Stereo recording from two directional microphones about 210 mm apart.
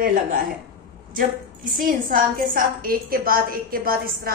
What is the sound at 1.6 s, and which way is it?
A woman's voice, 45° right (ahead or behind).